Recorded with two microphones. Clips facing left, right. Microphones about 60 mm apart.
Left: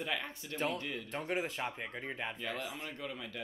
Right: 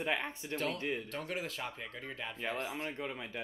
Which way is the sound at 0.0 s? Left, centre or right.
Right.